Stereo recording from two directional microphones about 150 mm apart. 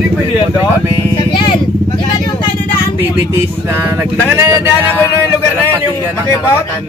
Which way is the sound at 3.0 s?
15° right (ahead or behind).